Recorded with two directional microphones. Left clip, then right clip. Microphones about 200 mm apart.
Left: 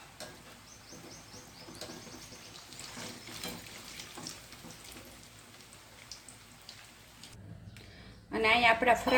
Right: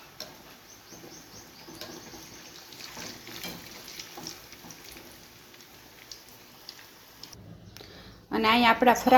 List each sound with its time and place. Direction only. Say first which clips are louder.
8.3 s a woman's voice: right 3 dB; 30° right (ahead or behind)